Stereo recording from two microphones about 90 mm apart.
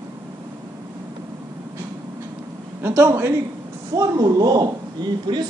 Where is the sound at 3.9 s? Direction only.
45° right (ahead or behind).